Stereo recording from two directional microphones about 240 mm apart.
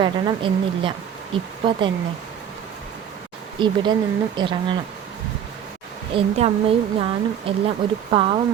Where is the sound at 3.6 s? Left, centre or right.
Centre.